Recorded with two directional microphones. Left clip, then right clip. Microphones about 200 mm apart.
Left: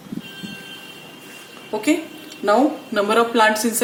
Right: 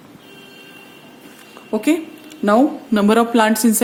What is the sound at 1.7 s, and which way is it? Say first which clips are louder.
Speech: right 2 dB; 50° right (ahead or behind).